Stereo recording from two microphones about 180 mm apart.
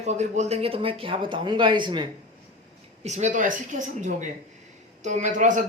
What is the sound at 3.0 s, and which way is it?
Speech, 40° right (ahead or behind).